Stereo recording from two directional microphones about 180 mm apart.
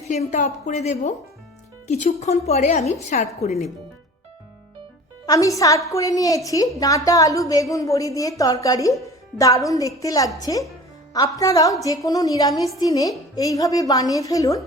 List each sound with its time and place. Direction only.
0.1 s a woman's voice: 40° left (ahead or behind)
5.2 s a woman's voice: 20° left (ahead or behind)